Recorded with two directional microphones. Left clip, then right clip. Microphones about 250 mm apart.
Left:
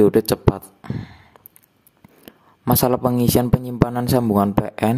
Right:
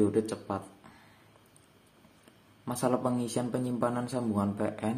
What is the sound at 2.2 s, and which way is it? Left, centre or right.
Speech, left.